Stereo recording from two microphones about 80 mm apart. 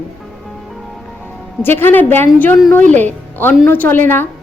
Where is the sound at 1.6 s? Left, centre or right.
Left.